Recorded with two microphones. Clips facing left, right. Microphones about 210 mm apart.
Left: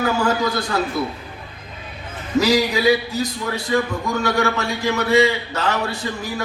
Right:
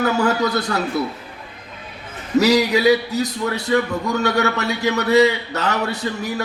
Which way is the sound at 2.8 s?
40° right (ahead or behind).